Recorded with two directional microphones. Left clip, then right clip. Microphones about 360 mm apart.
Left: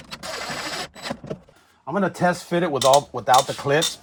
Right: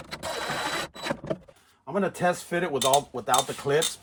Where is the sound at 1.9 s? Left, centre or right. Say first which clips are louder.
Left 4 dB; centre.